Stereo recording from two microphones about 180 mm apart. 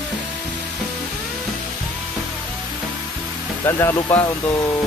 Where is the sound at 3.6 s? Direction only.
15° left (ahead or behind).